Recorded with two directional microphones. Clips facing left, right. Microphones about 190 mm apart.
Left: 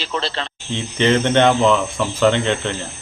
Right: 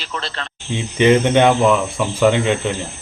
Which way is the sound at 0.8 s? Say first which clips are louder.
Right 3 dB; 10° right (ahead or behind).